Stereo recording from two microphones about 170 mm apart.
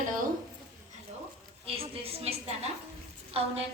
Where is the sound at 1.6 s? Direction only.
35° right (ahead or behind).